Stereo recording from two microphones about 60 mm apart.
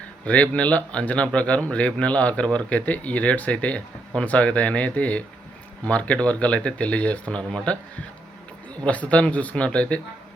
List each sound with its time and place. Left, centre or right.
0.3 s a man's voice: left